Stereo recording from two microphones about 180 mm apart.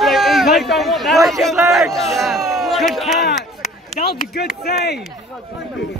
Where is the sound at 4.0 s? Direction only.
60° left (ahead or behind).